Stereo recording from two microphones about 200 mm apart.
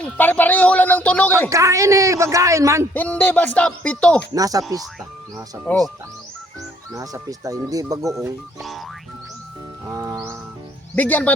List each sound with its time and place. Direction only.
0.0 s a man's voice: 10° left (ahead or behind)
1.5 s speech: 15° right (ahead or behind)
2.9 s a man's voice: 5° left (ahead or behind)
4.4 s speech: 20° right (ahead or behind)
6.9 s speech: 15° right (ahead or behind)
8.0 s speech: centre (ahead or behind)
9.8 s music: 15° right (ahead or behind)
10.9 s a man's voice: 10° left (ahead or behind)